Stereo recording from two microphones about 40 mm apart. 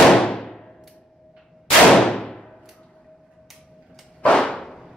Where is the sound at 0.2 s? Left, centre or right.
Centre.